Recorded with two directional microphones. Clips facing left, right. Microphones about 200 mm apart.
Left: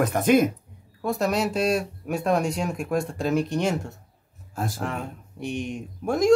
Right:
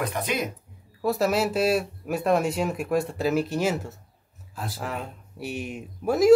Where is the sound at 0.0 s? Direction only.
50° left (ahead or behind).